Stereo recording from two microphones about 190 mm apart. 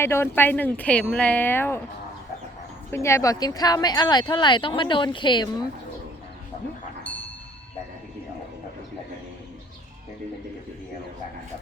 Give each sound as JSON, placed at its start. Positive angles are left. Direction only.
{"t": 0.0, "sound": "speech", "side_deg": 15}
{"t": 2.9, "sound": "speech", "side_deg": 15}